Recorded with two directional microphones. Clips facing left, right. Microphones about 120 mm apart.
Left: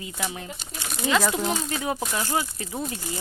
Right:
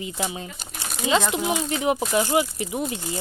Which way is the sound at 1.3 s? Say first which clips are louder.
Right 2 dB; 10° right (ahead or behind).